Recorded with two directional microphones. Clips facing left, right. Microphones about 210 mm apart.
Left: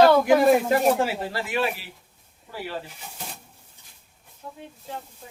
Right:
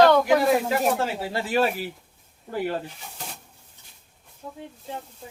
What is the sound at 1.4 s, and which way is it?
Speech, 40° right (ahead or behind).